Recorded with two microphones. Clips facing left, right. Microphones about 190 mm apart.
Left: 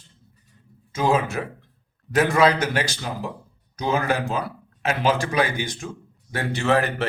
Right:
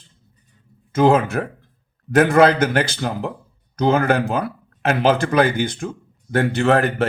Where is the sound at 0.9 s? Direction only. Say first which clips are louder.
Right 6 dB; 55° right (ahead or behind).